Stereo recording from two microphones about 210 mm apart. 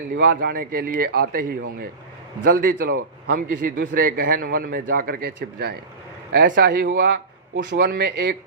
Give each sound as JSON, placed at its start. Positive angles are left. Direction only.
{"t": 0.3, "sound": "a man's voice", "side_deg": -40}